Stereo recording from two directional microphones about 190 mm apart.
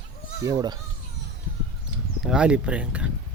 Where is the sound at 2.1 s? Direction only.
5° right (ahead or behind).